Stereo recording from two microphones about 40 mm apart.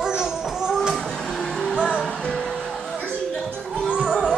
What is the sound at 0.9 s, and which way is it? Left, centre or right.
Vehicle, centre.